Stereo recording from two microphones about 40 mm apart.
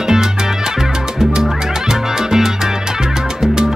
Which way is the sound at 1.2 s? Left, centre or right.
Centre.